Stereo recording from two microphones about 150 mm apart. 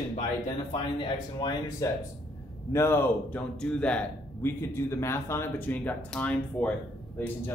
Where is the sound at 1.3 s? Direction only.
30° left (ahead or behind).